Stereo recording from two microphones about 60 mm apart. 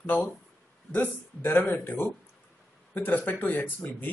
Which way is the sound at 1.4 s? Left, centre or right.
Left.